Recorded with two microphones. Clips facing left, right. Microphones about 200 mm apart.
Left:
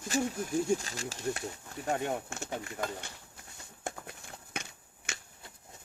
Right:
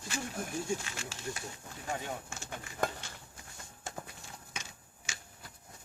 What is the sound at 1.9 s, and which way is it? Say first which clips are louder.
Speech: left 6 dB; 60° left (ahead or behind).